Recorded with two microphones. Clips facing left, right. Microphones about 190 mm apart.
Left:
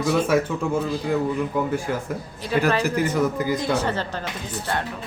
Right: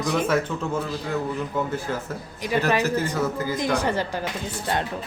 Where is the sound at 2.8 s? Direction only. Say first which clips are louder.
Left 2 dB; 15° left (ahead or behind).